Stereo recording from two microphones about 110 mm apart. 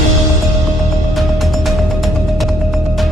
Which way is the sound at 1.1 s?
Centre (ahead or behind).